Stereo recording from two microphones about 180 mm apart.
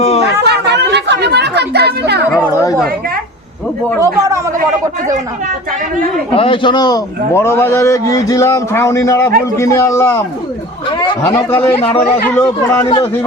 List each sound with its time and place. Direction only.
0.0 s chatter: 35° left (ahead or behind)
0.4 s chatter: 65° right (ahead or behind)
2.5 s chatter: 20° left (ahead or behind)
4.0 s a man's voice: 15° right (ahead or behind)
6.3 s a man's voice: 30° left (ahead or behind); by 10.2 s 15° left (ahead or behind)
10.8 s speech: 25° left (ahead or behind)
11.5 s a man's voice: 10° left (ahead or behind)
11.8 s speech: 35° left (ahead or behind)
12.4 s a man's voice: 15° left (ahead or behind)